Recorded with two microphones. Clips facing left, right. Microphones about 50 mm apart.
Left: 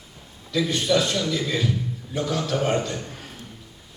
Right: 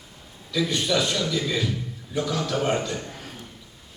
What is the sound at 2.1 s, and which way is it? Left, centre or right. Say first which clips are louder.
Speech: even; left.